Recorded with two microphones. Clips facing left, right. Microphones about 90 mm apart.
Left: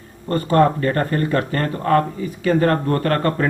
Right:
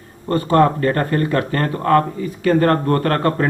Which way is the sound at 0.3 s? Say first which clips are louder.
Right 1 dB; 40° right (ahead or behind).